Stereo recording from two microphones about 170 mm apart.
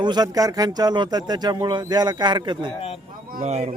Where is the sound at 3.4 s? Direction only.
40° right (ahead or behind).